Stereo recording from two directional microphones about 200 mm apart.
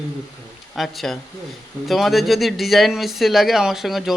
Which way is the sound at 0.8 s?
Centre (ahead or behind).